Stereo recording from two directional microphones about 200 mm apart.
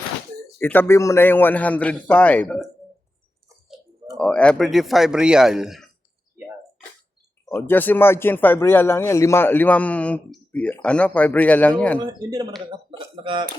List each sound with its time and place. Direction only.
0.6 s speech: 10° left (ahead or behind)
4.2 s a man's voice: 5° left (ahead or behind)
7.4 s speech: 10° left (ahead or behind)
12.3 s speech: 20° right (ahead or behind)